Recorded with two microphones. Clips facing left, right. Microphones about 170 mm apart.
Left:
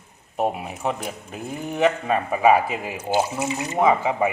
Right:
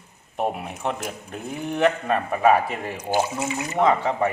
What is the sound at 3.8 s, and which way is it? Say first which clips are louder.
Speech: left 1 dB; 5° left (ahead or behind).